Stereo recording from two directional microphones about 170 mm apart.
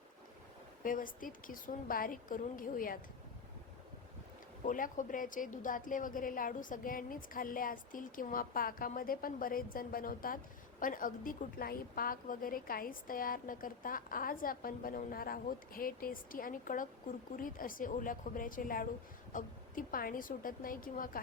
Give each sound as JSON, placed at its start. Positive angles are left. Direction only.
{"t": 0.9, "sound": "a woman's voice", "side_deg": 55}
{"t": 4.6, "sound": "a woman's voice", "side_deg": 50}